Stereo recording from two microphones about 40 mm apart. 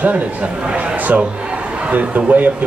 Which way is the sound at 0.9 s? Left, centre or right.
Right.